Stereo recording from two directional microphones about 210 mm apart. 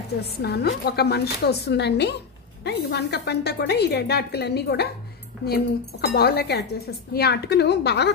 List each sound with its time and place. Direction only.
0.2 s a woman's voice: 50° left (ahead or behind)